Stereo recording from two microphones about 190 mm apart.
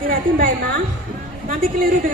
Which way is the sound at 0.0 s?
50° right (ahead or behind).